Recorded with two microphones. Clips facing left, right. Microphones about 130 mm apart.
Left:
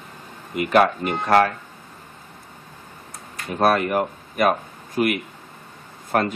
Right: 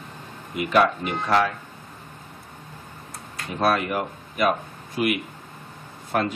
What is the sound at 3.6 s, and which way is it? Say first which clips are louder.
Speech: left 4 dB; 50° left (ahead or behind).